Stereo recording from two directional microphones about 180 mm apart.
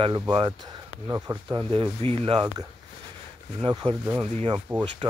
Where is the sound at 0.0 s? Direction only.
25° right (ahead or behind).